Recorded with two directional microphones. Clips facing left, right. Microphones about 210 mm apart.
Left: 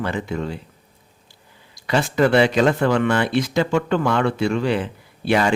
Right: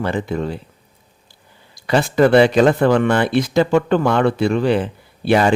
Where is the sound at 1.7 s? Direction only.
35° right (ahead or behind).